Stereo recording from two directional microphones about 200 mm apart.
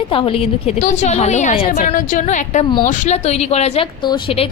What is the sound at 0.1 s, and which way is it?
A woman's voice, 25° left (ahead or behind).